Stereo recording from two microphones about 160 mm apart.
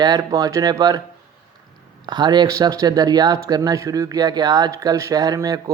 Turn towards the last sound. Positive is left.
turn(degrees=-25)  # may be behind; listen again after turning